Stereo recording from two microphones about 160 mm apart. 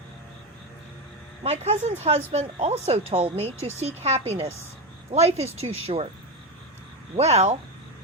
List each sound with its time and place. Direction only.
1.5 s speech: 40° right (ahead or behind)
7.2 s speech: 40° right (ahead or behind)